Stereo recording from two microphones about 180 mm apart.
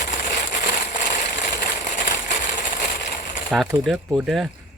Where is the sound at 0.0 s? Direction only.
45° left (ahead or behind).